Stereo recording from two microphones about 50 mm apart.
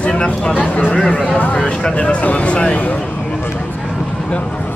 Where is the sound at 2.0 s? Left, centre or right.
Left.